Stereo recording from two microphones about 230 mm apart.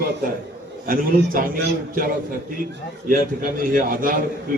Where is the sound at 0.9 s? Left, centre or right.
Right.